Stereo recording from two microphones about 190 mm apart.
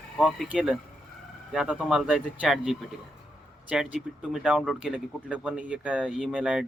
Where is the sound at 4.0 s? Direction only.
Centre (ahead or behind).